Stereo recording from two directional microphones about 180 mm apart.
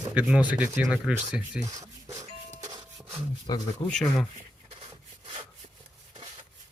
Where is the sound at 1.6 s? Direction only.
20° right (ahead or behind).